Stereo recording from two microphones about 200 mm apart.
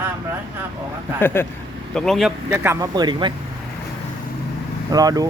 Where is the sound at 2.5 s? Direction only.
15° right (ahead or behind).